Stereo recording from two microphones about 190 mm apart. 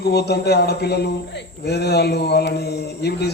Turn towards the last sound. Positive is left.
turn(degrees=60)  # may be behind; listen again after turning